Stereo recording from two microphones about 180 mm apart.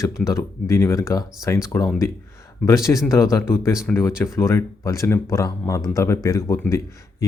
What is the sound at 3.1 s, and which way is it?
Speech, 15° left (ahead or behind).